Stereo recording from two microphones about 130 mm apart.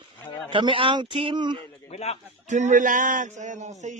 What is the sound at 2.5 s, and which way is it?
Speech, 80° right.